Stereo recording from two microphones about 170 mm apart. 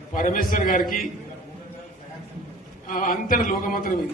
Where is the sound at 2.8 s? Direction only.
50° left (ahead or behind).